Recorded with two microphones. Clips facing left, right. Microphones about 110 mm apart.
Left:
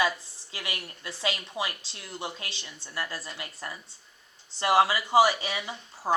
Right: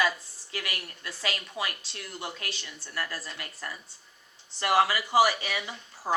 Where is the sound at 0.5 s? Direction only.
25° left (ahead or behind).